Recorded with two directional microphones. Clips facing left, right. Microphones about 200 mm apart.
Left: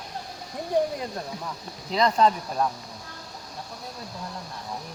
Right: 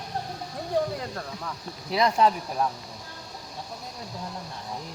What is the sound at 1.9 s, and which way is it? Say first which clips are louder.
Speech: left 1 dB; 10° right (ahead or behind).